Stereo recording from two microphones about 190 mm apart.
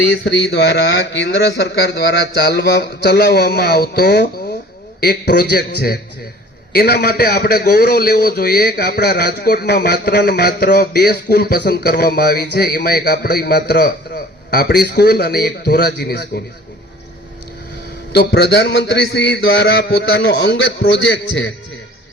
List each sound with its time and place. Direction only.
0.1 s a man's voice: 65° left (ahead or behind)
18.1 s a man's voice: 60° left (ahead or behind)